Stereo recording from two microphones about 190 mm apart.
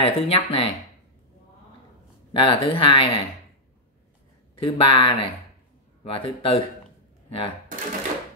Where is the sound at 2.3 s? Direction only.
30° left (ahead or behind).